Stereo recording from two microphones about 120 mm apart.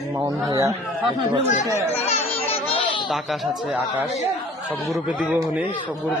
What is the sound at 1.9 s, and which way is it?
Children playing, 60° left (ahead or behind).